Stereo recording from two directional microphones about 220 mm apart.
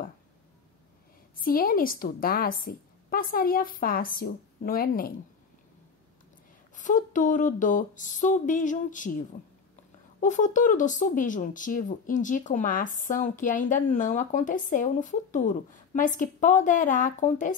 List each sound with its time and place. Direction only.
1.4 s speech: 40° left (ahead or behind)
6.7 s speech: 35° left (ahead or behind)
10.2 s speech: 35° left (ahead or behind)